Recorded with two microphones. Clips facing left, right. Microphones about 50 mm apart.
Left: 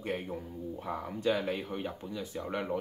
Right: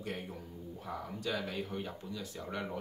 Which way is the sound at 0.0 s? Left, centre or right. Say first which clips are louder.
Left 6 dB; left.